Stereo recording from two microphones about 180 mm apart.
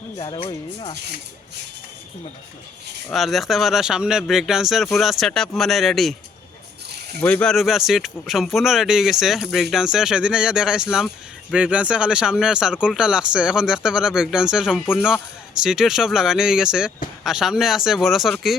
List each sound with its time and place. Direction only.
0.3 s speech: 30° left (ahead or behind)
3.1 s speech: centre (ahead or behind)
7.2 s speech: 10° left (ahead or behind)